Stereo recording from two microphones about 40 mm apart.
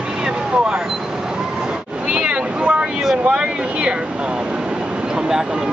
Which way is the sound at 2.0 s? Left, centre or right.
Right.